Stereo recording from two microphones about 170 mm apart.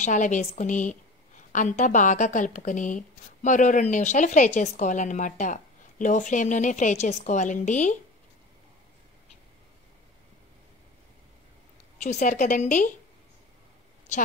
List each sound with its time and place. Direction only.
0.0 s speech: 45° left (ahead or behind)
12.0 s speech: 45° left (ahead or behind)